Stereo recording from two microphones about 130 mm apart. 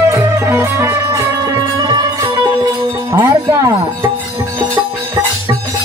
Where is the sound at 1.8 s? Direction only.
35° right (ahead or behind).